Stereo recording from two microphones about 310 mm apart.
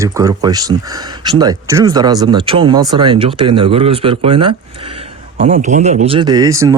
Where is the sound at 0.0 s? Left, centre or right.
Centre.